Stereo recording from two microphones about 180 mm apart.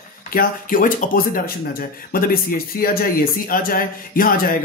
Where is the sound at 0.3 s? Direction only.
50° left (ahead or behind).